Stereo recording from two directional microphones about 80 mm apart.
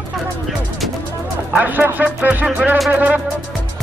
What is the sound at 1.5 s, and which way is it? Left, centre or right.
Speech, right.